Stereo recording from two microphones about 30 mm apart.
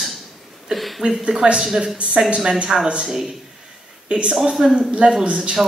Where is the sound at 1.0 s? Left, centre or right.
Right.